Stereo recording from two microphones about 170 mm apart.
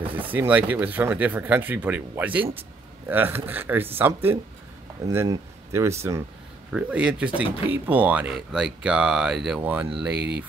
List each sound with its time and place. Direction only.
0.1 s speech: 10° right (ahead or behind)
6.7 s speech: 5° right (ahead or behind)
10.1 s speech: 90° right